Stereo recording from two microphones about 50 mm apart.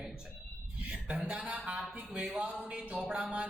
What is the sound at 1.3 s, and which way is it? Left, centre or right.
Speech, right.